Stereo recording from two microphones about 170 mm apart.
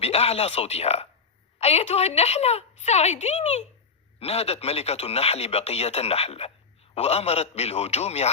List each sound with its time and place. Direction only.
0.0 s speech: 35° left (ahead or behind)